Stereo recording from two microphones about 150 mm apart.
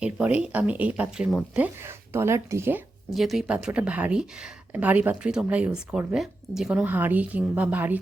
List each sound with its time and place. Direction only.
0.0 s speech: 5° right (ahead or behind)
1.5 s speech: 15° right (ahead or behind)
3.2 s speech: centre (ahead or behind)